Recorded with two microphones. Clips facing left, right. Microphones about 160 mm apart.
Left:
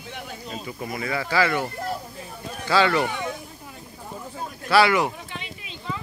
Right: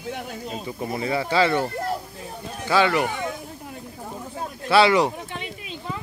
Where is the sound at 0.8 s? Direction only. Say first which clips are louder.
Right 4 dB; 30° right (ahead or behind).